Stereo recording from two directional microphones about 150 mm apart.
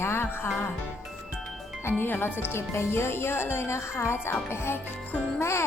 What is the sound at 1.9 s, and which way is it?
Speech, 15° left (ahead or behind).